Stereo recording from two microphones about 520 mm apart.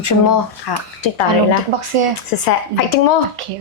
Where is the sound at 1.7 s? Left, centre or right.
Right.